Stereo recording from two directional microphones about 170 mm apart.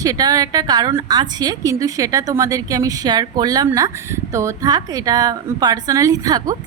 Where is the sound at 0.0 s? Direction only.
20° right (ahead or behind).